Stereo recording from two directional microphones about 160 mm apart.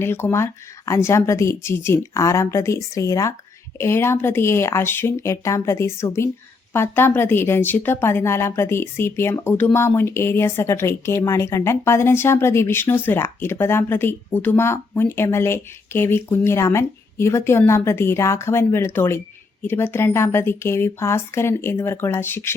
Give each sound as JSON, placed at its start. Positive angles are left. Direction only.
{"t": 0.0, "sound": "a woman's voice", "side_deg": 15}